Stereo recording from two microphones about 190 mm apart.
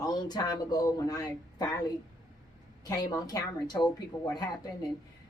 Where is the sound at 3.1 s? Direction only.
20° left (ahead or behind).